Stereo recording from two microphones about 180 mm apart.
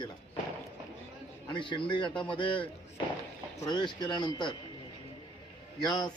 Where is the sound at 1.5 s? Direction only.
25° left (ahead or behind).